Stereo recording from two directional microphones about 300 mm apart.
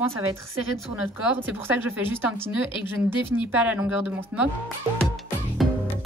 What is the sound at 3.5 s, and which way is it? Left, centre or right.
Speech, centre.